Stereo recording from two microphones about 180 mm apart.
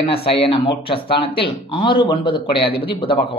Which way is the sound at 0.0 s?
30° left (ahead or behind).